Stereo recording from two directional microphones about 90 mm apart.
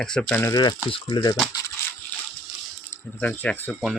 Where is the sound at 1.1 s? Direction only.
55° left (ahead or behind).